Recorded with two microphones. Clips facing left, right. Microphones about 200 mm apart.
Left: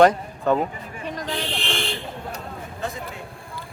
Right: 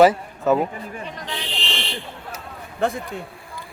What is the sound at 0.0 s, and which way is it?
Speech, 5° right (ahead or behind).